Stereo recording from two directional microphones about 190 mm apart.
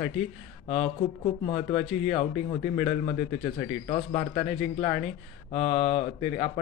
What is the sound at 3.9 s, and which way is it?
Speech, 35° left (ahead or behind).